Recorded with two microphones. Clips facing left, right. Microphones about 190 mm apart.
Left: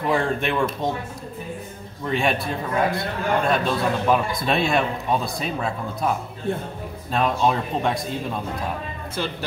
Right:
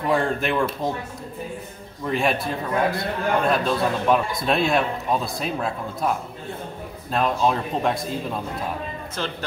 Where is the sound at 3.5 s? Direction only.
Centre (ahead or behind).